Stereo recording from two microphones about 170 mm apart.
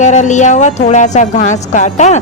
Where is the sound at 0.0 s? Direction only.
45° left (ahead or behind).